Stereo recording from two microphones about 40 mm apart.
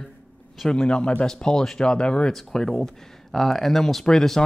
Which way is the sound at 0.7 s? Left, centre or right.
Centre.